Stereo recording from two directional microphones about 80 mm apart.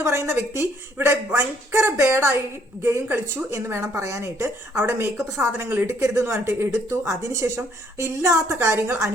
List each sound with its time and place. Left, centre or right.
0.0 s a woman's voice: right